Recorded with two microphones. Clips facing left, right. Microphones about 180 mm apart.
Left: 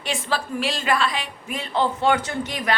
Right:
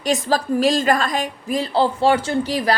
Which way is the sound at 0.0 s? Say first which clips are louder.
Right 7 dB; 40° right (ahead or behind).